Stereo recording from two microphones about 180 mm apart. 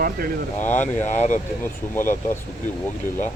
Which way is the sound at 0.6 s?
45° left (ahead or behind).